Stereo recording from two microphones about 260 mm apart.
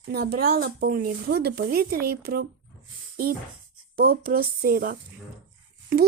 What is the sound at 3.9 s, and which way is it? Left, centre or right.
A woman's voice, right.